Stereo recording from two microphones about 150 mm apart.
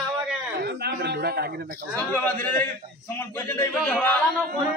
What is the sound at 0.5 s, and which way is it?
Speech, 90° right.